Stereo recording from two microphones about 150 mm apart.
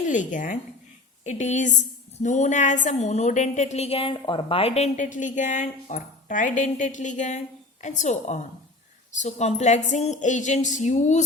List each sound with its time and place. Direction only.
0.1 s a woman's voice: 60° left (ahead or behind)